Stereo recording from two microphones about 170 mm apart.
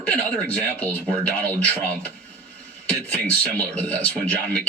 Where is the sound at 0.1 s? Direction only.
10° left (ahead or behind).